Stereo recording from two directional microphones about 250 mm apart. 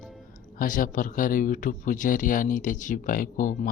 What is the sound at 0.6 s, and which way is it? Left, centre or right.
Speech, left.